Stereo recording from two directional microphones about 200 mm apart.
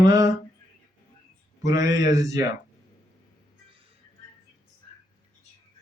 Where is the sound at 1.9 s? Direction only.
15° right (ahead or behind).